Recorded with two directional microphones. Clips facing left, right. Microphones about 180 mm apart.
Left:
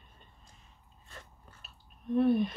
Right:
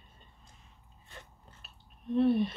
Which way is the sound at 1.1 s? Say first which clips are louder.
Even; 20° right (ahead or behind).